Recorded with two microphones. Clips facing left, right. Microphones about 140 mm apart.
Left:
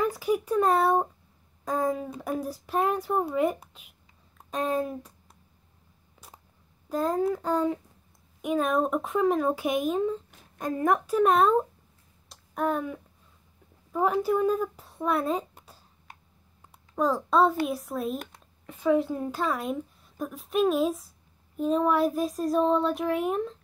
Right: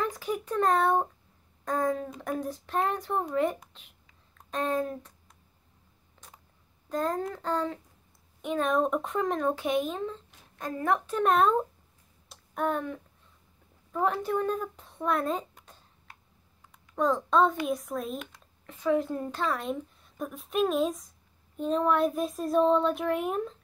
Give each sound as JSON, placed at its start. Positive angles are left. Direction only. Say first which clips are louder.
{"t": 0.0, "sound": "a child's voice", "louder": "left 5 dB", "side_deg": 10}
{"t": 1.6, "sound": "a sound", "louder": "left 1 dB", "side_deg": 10}
{"t": 2.2, "sound": "speech", "louder": "left 2 dB", "side_deg": 10}
{"t": 6.2, "sound": "a sound", "louder": "left 3 dB", "side_deg": 10}
{"t": 6.9, "sound": "a woman's voice", "louder": "left 4 dB", "side_deg": 10}
{"t": 12.3, "sound": "a sound", "louder": "left 2 dB", "side_deg": 0}
{"t": 13.9, "sound": "a woman's voice", "louder": "left 3 dB", "side_deg": 10}
{"t": 16.9, "sound": "a woman's voice", "louder": "left 1 dB", "side_deg": 5}
{"t": 18.7, "sound": "a woman's voice", "louder": "left 3 dB", "side_deg": 20}
{"t": 18.9, "sound": "a woman's voice", "louder": "left 2 dB", "side_deg": 5}